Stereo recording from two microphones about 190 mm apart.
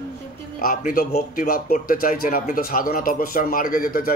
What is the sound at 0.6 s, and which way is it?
A man's voice, 50° left (ahead or behind).